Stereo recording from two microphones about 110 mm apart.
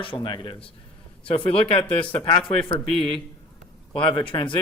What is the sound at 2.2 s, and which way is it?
Speech, 45° left (ahead or behind).